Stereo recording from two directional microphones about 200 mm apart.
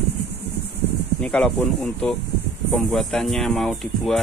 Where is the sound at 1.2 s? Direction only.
5° left (ahead or behind).